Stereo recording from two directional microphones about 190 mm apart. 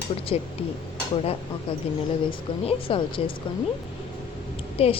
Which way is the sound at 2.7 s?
30° left (ahead or behind).